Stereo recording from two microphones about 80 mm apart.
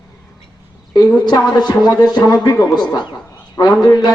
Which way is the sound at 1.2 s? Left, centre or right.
Left.